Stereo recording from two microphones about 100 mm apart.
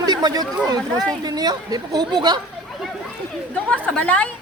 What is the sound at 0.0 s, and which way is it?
Speech, 45° right (ahead or behind).